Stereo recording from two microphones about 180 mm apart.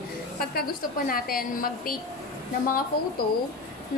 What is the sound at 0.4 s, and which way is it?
A woman's voice, 55° left (ahead or behind).